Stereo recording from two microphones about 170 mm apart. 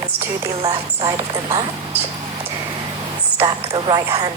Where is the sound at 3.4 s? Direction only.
30° right (ahead or behind).